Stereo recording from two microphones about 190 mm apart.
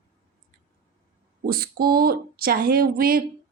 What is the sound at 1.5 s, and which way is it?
Speech, 50° right (ahead or behind).